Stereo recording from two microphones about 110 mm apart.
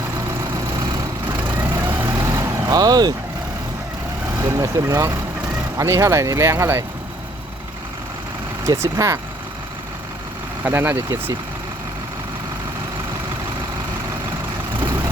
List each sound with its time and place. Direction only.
1.3 s vehicle: 20° right (ahead or behind); by 3.2 s 35° right (ahead or behind)
4.4 s speech: 25° right (ahead or behind)
8.6 s speech: 25° right (ahead or behind)
10.6 s speech: 20° right (ahead or behind)